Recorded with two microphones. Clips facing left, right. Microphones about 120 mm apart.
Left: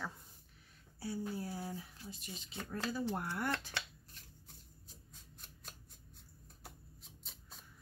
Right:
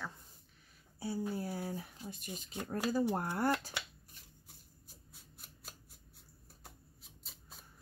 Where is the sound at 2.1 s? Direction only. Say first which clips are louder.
Right 3 dB; 50° right (ahead or behind).